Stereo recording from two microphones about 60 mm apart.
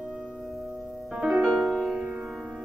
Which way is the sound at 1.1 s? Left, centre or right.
Centre.